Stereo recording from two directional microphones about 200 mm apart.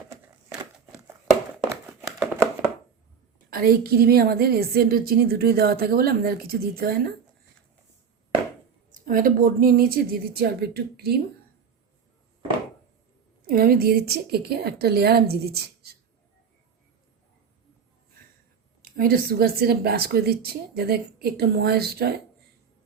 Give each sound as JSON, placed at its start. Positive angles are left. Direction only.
{"t": 0.6, "sound": "a sound", "side_deg": -15}
{"t": 3.5, "sound": "a woman's voice", "side_deg": -45}
{"t": 8.9, "sound": "a woman's voice", "side_deg": -40}
{"t": 13.5, "sound": "a woman's voice", "side_deg": -50}
{"t": 18.8, "sound": "a woman's voice", "side_deg": -45}